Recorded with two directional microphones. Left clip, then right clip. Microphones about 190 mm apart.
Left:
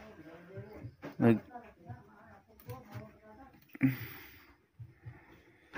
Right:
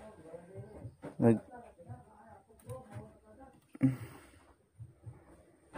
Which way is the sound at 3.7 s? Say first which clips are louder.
Even; 15° right (ahead or behind).